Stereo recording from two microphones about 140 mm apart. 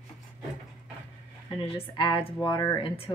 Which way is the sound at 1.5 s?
40° left (ahead or behind).